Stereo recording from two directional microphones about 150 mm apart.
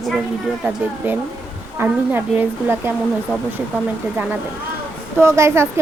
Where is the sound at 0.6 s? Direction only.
10° right (ahead or behind).